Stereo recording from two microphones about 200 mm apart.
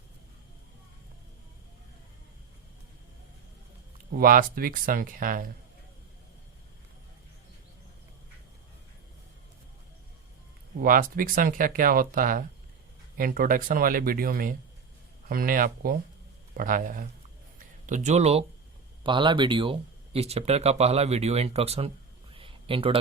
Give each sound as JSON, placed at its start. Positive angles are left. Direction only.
{"t": 4.1, "sound": "speech", "side_deg": -45}
{"t": 10.8, "sound": "speech", "side_deg": -45}